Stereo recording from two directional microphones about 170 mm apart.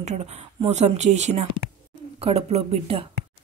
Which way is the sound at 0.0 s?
40° right (ahead or behind).